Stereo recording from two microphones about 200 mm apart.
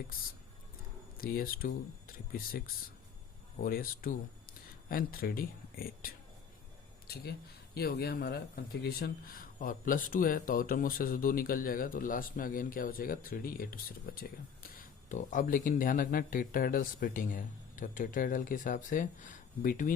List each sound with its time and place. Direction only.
1.2 s speech: 45° left (ahead or behind)